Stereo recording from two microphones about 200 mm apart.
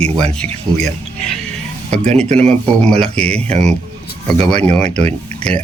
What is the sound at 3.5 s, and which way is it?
Speech, 35° right (ahead or behind).